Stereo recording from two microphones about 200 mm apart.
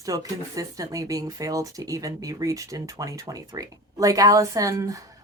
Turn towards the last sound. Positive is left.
turn(degrees=-15)  # may be behind; listen again after turning